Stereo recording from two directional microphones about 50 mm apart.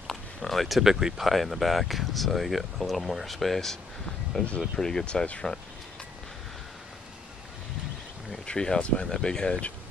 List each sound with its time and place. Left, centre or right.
0.0 s speech: centre; by 5.4 s left
8.5 s speech: centre